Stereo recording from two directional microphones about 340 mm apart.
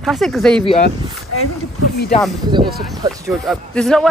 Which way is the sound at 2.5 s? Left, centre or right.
Centre.